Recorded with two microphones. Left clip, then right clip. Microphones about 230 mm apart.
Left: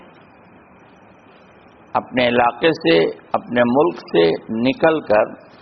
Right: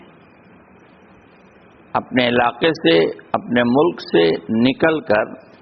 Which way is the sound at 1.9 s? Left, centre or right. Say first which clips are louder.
Even; right.